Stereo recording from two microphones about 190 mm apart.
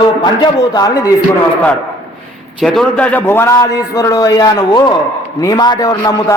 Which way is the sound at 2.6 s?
5° left (ahead or behind).